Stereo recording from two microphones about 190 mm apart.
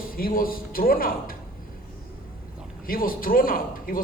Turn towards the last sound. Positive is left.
turn(degrees=50)  # may be behind; listen again after turning